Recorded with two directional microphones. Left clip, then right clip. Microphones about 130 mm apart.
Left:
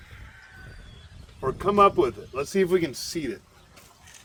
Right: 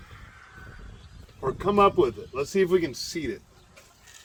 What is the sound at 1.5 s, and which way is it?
Speech, 20° left (ahead or behind).